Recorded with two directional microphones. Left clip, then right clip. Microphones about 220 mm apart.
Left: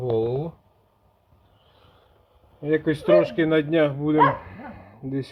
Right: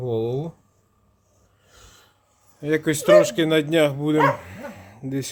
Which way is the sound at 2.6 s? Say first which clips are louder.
Right 1 dB; 10° right (ahead or behind).